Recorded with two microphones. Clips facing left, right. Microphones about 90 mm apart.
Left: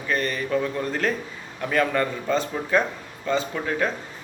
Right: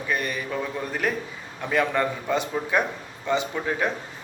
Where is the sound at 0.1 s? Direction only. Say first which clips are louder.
Left 2 dB; 10° right (ahead or behind).